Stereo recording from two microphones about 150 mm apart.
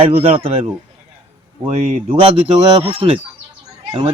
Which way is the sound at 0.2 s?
40° right (ahead or behind).